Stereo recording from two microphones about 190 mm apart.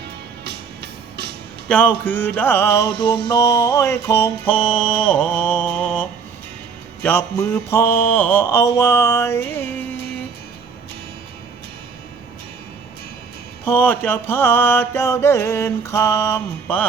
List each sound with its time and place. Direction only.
1.1 s music: 60° right (ahead or behind)
1.6 s mantra: 5° left (ahead or behind)
13.7 s mantra: 10° left (ahead or behind)